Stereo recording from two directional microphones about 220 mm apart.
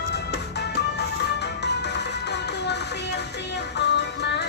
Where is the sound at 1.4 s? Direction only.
50° left (ahead or behind).